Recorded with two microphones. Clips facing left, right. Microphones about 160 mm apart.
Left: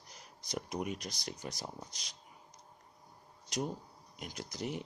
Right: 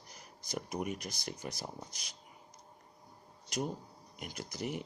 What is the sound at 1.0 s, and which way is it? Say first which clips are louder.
Speech: right 1 dB; 50° right (ahead or behind).